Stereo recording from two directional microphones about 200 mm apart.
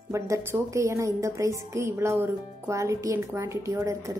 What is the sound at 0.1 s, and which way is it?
A woman's voice, 15° right (ahead or behind).